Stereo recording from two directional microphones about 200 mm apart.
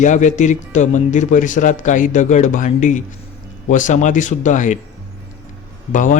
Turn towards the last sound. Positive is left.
turn(degrees=40)  # may be behind; listen again after turning